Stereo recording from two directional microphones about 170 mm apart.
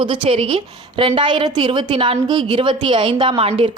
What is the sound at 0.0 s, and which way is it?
A woman's voice, 30° right (ahead or behind).